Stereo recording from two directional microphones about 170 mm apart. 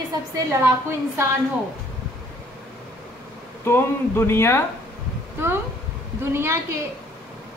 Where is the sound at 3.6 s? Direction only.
15° left (ahead or behind).